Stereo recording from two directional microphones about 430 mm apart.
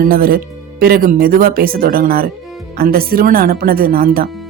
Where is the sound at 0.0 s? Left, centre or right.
Centre.